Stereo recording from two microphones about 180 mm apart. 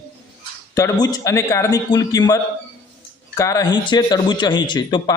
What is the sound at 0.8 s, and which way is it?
Speech, 20° left (ahead or behind).